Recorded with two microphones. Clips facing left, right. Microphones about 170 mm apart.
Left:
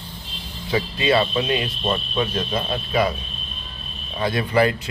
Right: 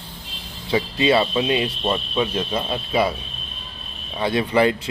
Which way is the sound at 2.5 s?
25° right (ahead or behind).